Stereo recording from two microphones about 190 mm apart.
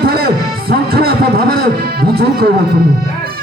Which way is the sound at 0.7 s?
55° right (ahead or behind).